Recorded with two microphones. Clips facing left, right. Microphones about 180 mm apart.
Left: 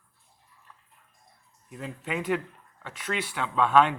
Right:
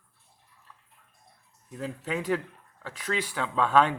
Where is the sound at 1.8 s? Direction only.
40° right (ahead or behind).